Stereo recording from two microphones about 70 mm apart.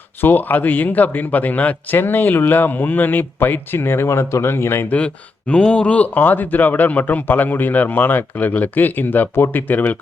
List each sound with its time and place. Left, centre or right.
0.2 s speech: left
4.9 s speech: centre